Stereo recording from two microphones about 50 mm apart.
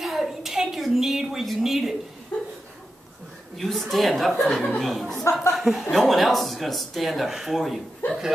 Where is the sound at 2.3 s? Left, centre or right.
Left.